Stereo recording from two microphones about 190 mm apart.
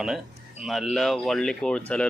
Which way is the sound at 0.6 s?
Centre (ahead or behind).